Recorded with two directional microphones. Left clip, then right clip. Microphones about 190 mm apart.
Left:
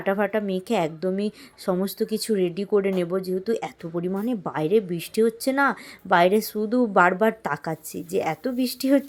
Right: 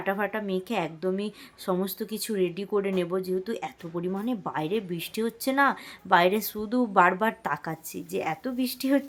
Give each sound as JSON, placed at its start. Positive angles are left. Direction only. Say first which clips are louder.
{"t": 0.0, "sound": "a woman's voice", "louder": "left 5 dB", "side_deg": 15}